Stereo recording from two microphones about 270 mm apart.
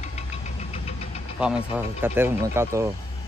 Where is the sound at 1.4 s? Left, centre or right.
Centre.